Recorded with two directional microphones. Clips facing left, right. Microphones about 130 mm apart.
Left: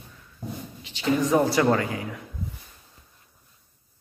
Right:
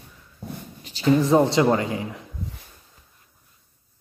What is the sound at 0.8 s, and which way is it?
Speech, 40° right (ahead or behind).